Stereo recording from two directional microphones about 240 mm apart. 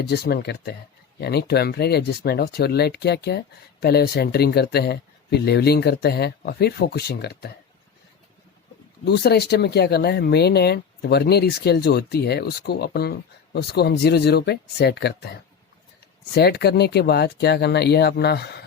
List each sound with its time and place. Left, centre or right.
0.1 s speech: left
9.0 s speech: left